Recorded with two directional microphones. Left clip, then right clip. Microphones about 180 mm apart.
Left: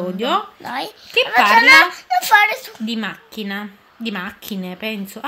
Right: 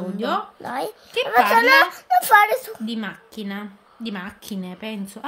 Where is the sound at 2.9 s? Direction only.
20° left (ahead or behind).